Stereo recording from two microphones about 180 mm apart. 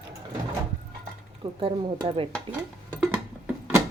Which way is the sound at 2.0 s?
30° right (ahead or behind).